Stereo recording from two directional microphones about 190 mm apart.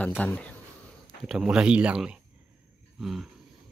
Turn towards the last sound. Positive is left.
turn(degrees=0)  # may be behind; listen again after turning